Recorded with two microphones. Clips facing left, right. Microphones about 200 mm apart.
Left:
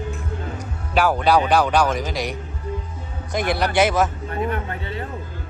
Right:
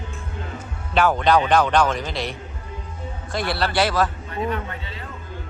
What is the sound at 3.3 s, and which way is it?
Speech, 15° left (ahead or behind).